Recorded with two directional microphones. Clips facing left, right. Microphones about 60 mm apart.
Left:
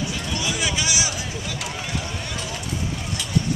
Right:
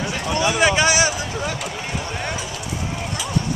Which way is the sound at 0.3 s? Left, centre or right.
Right.